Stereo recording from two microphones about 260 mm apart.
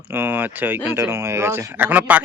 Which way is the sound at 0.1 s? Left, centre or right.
Centre.